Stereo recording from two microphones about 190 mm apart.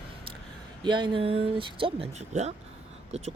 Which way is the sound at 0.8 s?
25° right (ahead or behind).